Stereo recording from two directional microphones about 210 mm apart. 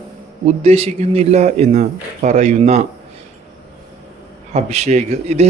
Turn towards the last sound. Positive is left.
turn(degrees=-30)  # may be behind; listen again after turning